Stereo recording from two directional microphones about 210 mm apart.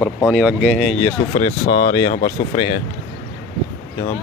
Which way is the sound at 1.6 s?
50° left (ahead or behind).